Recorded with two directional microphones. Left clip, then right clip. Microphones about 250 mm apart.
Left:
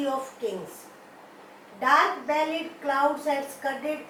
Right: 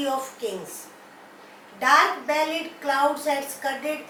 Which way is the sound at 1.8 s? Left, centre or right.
Centre.